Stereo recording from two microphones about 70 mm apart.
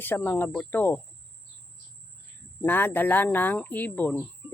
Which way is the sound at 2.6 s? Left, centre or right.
Left.